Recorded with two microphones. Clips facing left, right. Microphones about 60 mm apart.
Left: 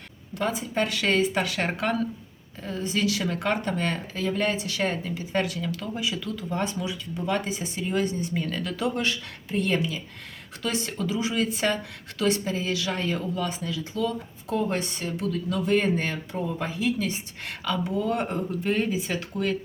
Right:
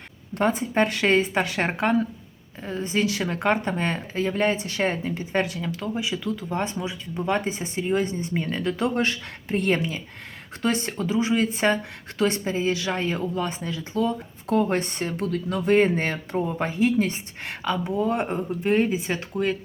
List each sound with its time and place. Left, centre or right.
0.3 s speech: right
14.4 s speech: right
17.7 s speech: right